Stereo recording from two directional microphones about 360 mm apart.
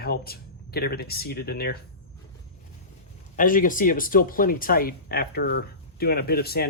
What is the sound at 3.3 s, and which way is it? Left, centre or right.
Speech, left.